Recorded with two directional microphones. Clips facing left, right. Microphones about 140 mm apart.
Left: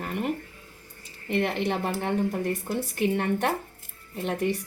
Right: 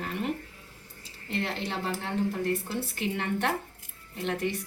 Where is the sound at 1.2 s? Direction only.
60° left (ahead or behind).